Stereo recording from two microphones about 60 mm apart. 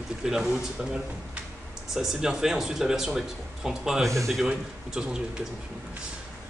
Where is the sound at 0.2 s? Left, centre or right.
Centre.